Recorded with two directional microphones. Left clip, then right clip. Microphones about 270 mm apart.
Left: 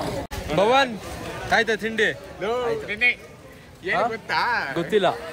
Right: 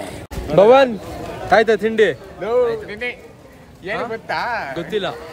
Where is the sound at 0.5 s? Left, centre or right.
Right.